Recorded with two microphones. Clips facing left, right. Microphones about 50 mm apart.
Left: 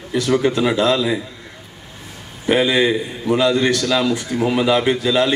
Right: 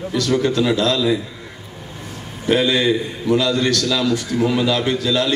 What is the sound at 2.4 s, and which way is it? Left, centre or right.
A man's voice, centre.